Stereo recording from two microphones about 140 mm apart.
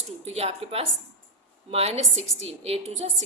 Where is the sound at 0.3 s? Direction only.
45° right (ahead or behind).